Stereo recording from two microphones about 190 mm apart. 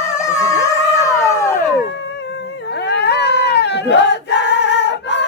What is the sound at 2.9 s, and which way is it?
Choir, 65° left (ahead or behind).